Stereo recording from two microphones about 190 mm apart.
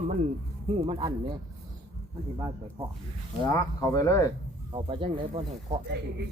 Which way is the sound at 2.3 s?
25° right (ahead or behind).